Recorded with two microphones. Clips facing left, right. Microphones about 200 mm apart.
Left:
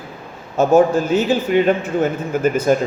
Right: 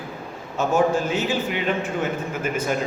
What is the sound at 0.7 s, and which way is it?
A man's voice, 40° left (ahead or behind).